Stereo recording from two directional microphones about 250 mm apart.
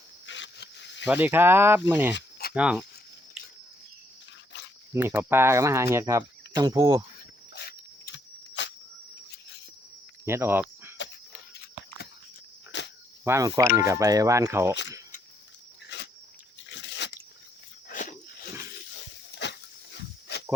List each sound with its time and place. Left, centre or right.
0.3 s a sound: left
1.0 s speech: centre
4.5 s a sound: left
4.9 s speech: centre
7.5 s dog: left
10.2 s speech: centre
11.3 s a sound: left
12.7 s cricket: left
13.2 s speech: centre
15.9 s dog: left
16.6 s crunch: left
17.8 s a sound: left
19.4 s dog: left